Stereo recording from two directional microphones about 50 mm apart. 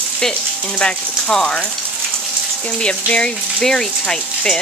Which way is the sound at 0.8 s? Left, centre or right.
Centre.